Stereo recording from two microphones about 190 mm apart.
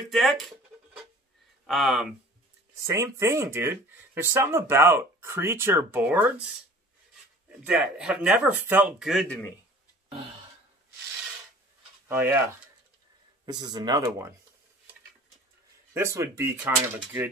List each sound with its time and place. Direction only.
0.1 s a sound: centre (ahead or behind)
1.7 s speech: centre (ahead or behind)
2.8 s speech: 15° right (ahead or behind)
7.6 s speech: 5° right (ahead or behind)
12.1 s speech: 10° right (ahead or behind)
13.5 s speech: 20° right (ahead or behind)
15.9 s speech: 15° right (ahead or behind)